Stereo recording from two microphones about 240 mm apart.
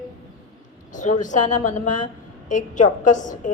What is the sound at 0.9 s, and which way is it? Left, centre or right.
A woman's voice, left.